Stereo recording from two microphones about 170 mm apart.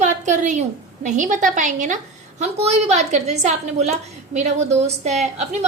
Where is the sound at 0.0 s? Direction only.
45° right (ahead or behind).